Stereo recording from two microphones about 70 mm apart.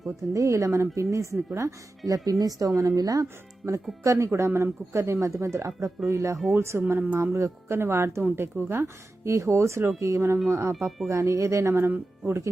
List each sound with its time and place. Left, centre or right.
0.3 s speech: right
2.0 s speech: right
4.0 s speech: right
7.2 s speech: right
10.8 s speech: centre
11.1 s speech: right